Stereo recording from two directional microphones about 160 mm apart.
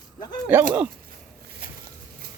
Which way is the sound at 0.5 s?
10° right (ahead or behind).